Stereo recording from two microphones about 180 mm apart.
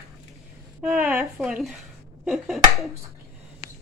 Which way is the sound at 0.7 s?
5° right (ahead or behind).